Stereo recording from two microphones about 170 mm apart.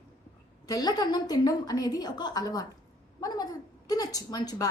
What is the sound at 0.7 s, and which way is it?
A woman's voice, 25° left (ahead or behind).